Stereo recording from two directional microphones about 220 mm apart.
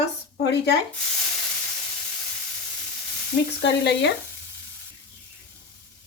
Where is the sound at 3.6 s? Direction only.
55° left (ahead or behind).